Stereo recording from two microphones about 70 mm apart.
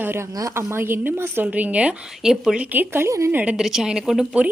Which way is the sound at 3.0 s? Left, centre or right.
Right.